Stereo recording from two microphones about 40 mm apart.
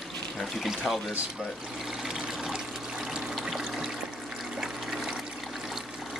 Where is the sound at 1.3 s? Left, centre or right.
Centre.